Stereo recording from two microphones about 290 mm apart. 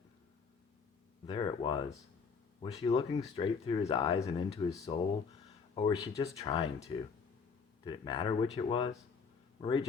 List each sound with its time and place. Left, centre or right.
1.3 s speech: centre